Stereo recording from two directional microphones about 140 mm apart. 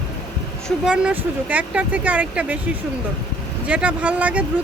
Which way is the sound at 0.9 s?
10° right (ahead or behind).